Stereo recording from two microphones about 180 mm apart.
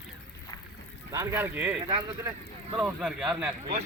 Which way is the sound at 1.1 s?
15° right (ahead or behind).